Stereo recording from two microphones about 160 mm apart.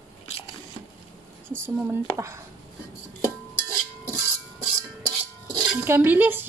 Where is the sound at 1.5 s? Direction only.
15° right (ahead or behind).